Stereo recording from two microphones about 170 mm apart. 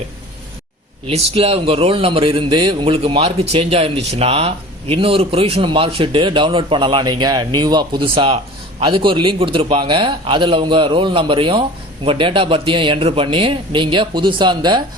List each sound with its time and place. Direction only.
1.0 s a man's voice: 35° right (ahead or behind)